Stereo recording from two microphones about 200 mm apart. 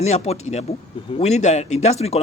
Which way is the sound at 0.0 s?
35° left (ahead or behind).